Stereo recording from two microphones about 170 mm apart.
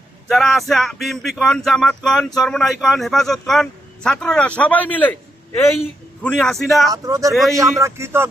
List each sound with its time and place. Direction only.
0.3 s speech: centre (ahead or behind)
6.2 s speech: 5° left (ahead or behind)
6.9 s speech: 20° right (ahead or behind)